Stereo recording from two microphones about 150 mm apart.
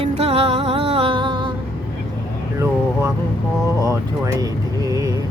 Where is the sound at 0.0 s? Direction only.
45° right (ahead or behind).